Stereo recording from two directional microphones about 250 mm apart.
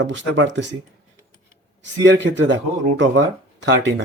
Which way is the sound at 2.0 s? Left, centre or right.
Right.